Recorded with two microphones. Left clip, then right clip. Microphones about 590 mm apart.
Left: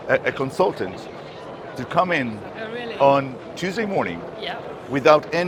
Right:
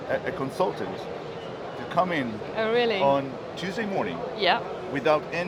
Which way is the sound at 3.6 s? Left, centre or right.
Left.